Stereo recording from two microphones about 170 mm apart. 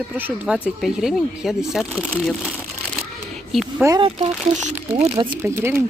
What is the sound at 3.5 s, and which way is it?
Speech, centre (ahead or behind).